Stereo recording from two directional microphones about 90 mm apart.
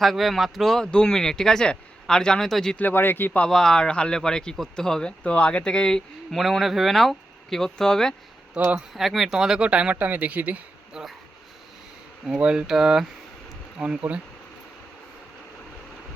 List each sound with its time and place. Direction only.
0.0 s speech: centre (ahead or behind)
2.7 s speech: 20° left (ahead or behind)
3.4 s speech: 5° left (ahead or behind)
8.5 s speech: 15° right (ahead or behind)
8.9 s speech: centre (ahead or behind)
12.2 s speech: 10° right (ahead or behind)